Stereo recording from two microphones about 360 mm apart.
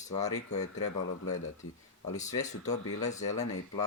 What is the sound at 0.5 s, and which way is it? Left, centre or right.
Speech, centre.